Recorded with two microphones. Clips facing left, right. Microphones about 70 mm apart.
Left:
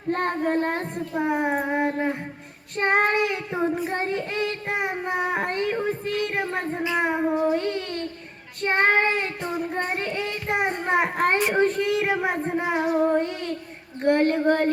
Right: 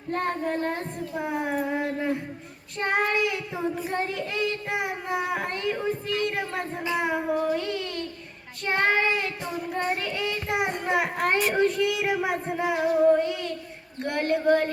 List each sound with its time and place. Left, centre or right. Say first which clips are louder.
0.1 s child singing: left 4 dB; left
5.8 s a child's voice: left 1 dB; left
6.9 s child singing: left 2 dB; left
7.3 s child singing: left 3 dB; left
7.6 s a child's voice: left 3 dB; left